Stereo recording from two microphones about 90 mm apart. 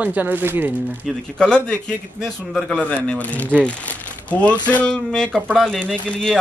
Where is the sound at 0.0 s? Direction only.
15° right (ahead or behind).